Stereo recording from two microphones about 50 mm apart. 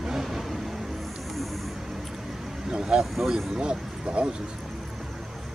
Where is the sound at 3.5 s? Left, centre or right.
Centre.